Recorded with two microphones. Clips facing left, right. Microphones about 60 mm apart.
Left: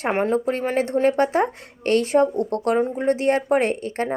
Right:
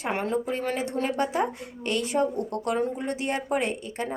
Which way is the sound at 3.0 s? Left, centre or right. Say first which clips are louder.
Left 9 dB; left.